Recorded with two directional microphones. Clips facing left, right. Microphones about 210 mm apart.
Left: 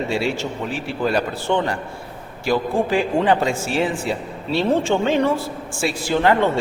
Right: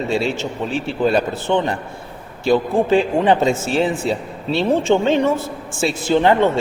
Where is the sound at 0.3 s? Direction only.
25° right (ahead or behind).